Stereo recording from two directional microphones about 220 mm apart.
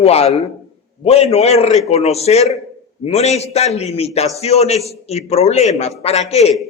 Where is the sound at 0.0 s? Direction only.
30° left (ahead or behind).